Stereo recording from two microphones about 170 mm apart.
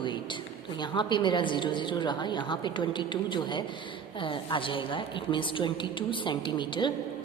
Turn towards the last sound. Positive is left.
turn(degrees=25)  # may be behind; listen again after turning